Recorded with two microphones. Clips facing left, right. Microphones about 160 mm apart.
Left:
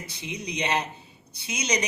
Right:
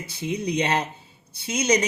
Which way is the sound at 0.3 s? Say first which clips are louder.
Right 5 dB; 50° right (ahead or behind).